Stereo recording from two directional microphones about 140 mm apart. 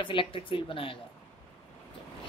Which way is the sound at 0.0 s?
40° left (ahead or behind).